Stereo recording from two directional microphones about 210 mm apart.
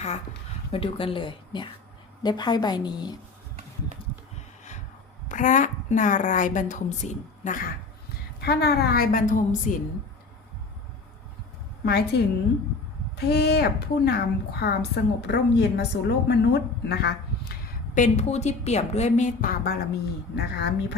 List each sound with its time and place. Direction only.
0.7 s speech: 25° left (ahead or behind)
5.3 s a woman's voice: 35° left (ahead or behind)
8.4 s a woman's voice: 50° left (ahead or behind)
11.9 s a woman's voice: 50° left (ahead or behind)
17.9 s a woman's voice: 35° left (ahead or behind); by 20.7 s 50° left (ahead or behind)